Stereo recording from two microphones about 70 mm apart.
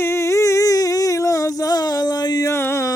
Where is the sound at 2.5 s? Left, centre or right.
Left.